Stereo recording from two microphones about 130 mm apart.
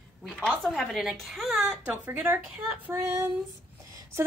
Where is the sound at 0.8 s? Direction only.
Centre (ahead or behind).